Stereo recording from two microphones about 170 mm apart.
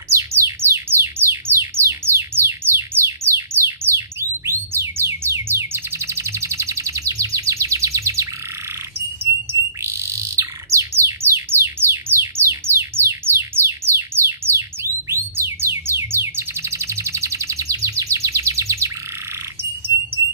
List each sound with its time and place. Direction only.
0.1 s music: 15° right (ahead or behind)
9.2 s bird: 15° right (ahead or behind)
20.2 s alarm: 20° right (ahead or behind)